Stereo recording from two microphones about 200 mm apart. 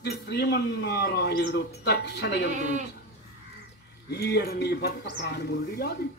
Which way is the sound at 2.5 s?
35° right (ahead or behind).